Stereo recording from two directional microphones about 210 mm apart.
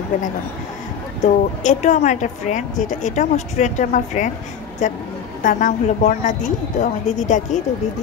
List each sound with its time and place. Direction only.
1.2 s a woman's voice: 35° left (ahead or behind)